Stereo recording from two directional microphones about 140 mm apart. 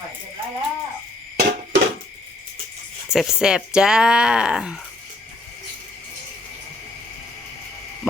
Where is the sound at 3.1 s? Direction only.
5° right (ahead or behind).